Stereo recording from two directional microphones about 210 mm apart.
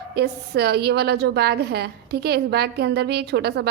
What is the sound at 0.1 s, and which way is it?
A woman's voice, 50° right (ahead or behind).